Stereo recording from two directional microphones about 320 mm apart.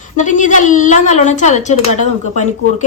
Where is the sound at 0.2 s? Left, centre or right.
Left.